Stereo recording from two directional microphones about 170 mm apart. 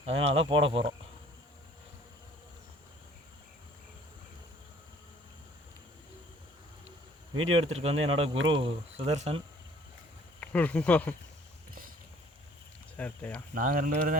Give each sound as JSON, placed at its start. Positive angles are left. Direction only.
{"t": 0.0, "sound": "speech", "side_deg": -35}
{"t": 7.6, "sound": "speech", "side_deg": -35}
{"t": 10.4, "sound": "speech", "side_deg": 10}
{"t": 13.0, "sound": "speech", "side_deg": 10}
{"t": 13.5, "sound": "speech", "side_deg": -55}